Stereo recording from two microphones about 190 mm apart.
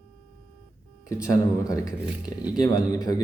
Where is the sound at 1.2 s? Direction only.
15° left (ahead or behind).